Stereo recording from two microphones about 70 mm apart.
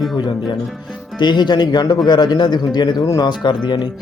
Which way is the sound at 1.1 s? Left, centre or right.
Left.